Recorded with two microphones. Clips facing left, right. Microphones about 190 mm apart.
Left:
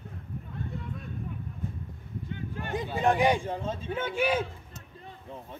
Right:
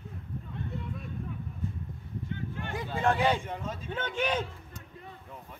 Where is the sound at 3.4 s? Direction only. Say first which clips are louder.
Left 4 dB; 30° left (ahead or behind).